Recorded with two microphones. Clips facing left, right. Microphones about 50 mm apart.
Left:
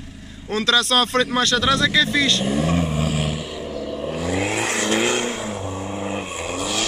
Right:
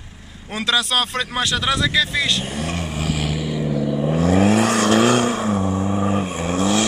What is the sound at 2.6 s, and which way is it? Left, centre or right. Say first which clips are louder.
Vehicle: left 4 dB; right.